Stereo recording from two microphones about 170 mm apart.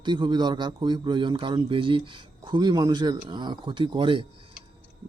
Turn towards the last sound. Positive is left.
turn(degrees=-30)  # may be behind; listen again after turning